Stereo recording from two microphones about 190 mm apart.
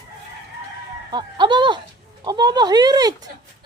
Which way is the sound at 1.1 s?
25° right (ahead or behind).